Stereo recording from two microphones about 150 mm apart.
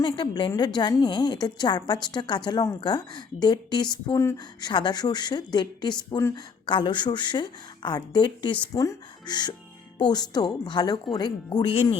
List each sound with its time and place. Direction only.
0.0 s a woman's voice: 30° left (ahead or behind)
4.6 s a woman's voice: 30° left (ahead or behind)